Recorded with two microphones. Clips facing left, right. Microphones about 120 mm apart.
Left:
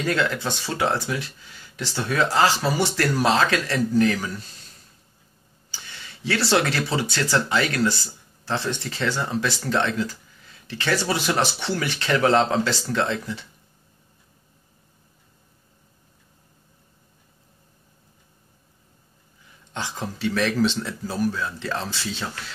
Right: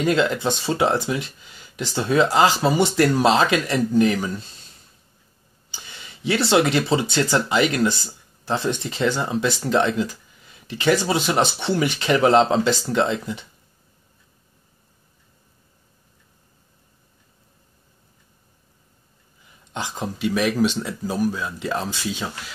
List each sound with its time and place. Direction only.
0.0 s speech: 20° right (ahead or behind)
5.7 s speech: 20° right (ahead or behind)
19.7 s speech: 15° right (ahead or behind)